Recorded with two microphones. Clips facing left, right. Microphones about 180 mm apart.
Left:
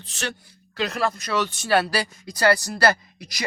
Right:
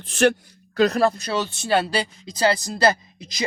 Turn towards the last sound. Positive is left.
turn(degrees=-20)  # may be behind; listen again after turning